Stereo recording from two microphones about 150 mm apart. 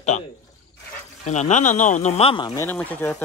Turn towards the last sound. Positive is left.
turn(degrees=15)  # may be behind; listen again after turning